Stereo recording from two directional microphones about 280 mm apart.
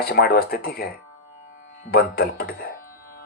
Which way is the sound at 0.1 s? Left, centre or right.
Left.